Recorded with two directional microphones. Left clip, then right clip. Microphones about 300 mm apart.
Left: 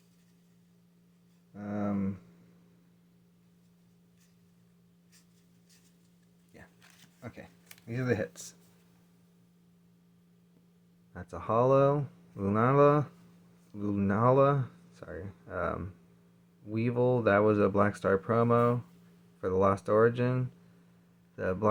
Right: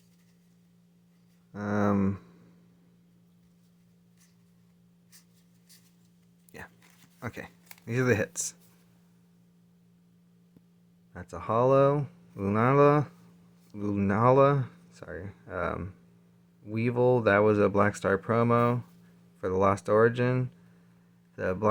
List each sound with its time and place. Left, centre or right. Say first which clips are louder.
1.5 s a sound: right 8 dB; right
7.2 s speech: right 8 dB; right
11.1 s speech: right 1 dB; centre